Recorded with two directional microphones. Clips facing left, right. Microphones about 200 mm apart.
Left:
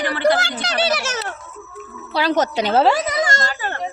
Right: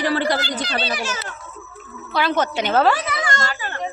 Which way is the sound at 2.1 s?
35° left (ahead or behind).